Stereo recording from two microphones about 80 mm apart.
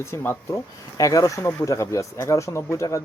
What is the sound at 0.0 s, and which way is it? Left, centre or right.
Speech, left.